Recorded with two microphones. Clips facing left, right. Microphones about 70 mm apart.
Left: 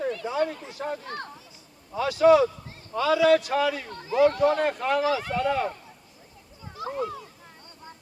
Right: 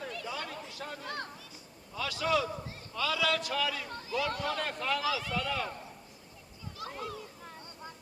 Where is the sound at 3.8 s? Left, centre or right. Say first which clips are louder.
Left 3 dB; left.